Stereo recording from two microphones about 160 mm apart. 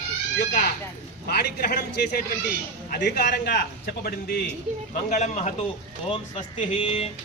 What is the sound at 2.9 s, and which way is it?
A man's voice, 80° left.